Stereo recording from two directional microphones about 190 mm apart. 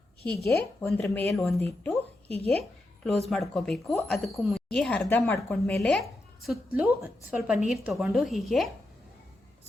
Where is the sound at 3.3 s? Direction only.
Centre (ahead or behind).